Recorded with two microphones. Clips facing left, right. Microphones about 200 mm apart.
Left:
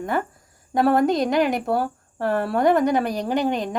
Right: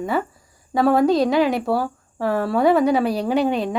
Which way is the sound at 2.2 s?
Centre (ahead or behind).